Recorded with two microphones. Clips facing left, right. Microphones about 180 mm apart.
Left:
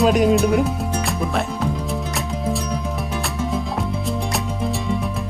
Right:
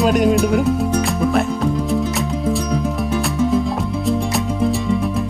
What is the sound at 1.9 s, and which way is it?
Music, centre (ahead or behind).